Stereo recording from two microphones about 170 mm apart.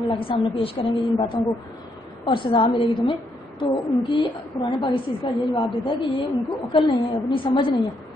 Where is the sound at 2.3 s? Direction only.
30° left (ahead or behind).